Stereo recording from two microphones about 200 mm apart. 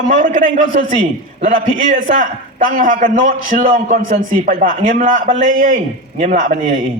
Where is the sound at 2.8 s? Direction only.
45° right (ahead or behind).